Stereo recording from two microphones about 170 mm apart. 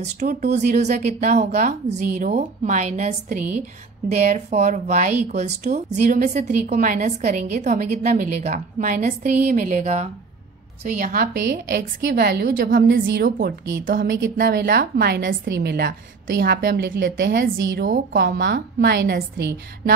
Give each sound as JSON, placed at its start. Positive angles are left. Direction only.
{"t": 0.2, "sound": "speech", "side_deg": -45}
{"t": 11.3, "sound": "a woman's voice", "side_deg": -90}
{"t": 12.5, "sound": "a woman's voice", "side_deg": -55}
{"t": 12.8, "sound": "a woman's voice", "side_deg": -90}
{"t": 14.5, "sound": "a woman's voice", "side_deg": -70}